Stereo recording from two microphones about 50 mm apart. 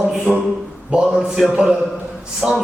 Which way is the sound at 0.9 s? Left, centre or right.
Right.